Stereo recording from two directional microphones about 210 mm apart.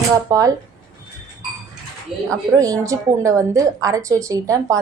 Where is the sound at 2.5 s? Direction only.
15° right (ahead or behind).